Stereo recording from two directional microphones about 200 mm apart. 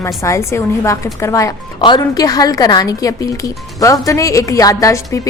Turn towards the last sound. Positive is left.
turn(degrees=15)  # may be behind; listen again after turning